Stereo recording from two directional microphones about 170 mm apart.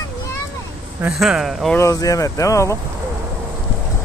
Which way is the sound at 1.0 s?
Centre (ahead or behind).